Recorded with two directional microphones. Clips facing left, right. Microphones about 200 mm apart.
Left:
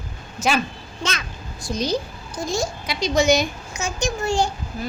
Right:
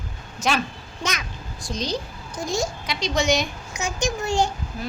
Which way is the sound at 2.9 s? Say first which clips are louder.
Left 5 dB; centre (ahead or behind).